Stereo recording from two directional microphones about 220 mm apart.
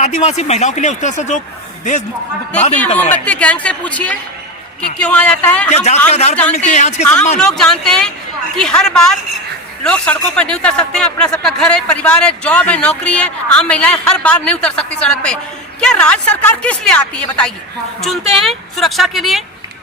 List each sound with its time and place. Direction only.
0.0 s speech: 30° left (ahead or behind)
3.2 s a man's voice: 5° left (ahead or behind)
5.7 s a man's voice: 30° left (ahead or behind)
7.3 s a man's voice: centre (ahead or behind)